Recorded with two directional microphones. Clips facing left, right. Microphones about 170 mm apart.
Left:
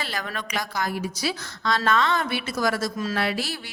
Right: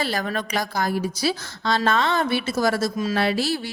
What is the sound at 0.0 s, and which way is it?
A woman's voice, 35° right (ahead or behind).